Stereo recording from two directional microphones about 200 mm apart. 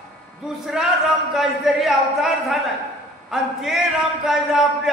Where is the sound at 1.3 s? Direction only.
Centre (ahead or behind).